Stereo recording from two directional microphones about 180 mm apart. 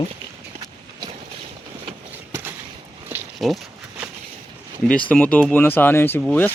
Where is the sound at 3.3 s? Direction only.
Centre (ahead or behind).